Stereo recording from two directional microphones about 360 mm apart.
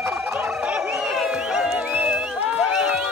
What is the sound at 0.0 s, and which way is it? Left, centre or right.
Music, centre.